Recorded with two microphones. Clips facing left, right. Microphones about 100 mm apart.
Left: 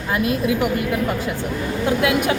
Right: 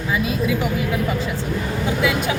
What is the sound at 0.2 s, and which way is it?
Speech, 60° left (ahead or behind).